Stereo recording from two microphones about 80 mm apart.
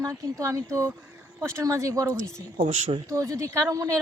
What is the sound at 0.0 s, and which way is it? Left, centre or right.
Speech, right.